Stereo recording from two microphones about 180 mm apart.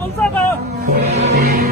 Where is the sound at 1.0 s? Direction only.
35° right (ahead or behind).